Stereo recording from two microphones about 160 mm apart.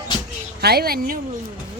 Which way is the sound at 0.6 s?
75° right (ahead or behind).